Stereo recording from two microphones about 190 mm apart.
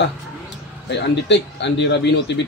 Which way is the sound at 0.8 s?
65° left (ahead or behind).